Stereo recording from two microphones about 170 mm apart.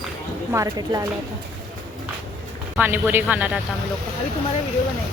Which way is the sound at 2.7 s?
10° right (ahead or behind).